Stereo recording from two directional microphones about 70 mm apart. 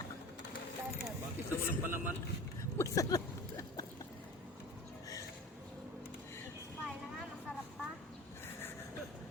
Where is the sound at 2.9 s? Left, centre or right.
Left.